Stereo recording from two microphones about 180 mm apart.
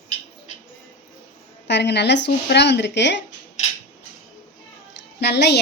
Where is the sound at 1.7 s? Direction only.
70° left (ahead or behind).